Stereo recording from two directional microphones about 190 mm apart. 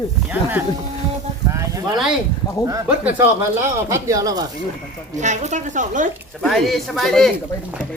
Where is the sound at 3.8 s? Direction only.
15° right (ahead or behind).